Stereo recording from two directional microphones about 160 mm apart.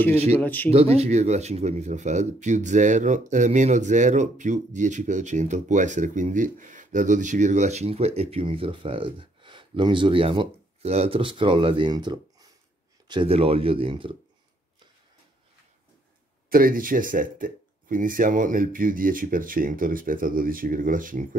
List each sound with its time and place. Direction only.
0.4 s speech: 10° left (ahead or behind)
0.7 s speech: 40° right (ahead or behind)
16.4 s speech: 65° right (ahead or behind)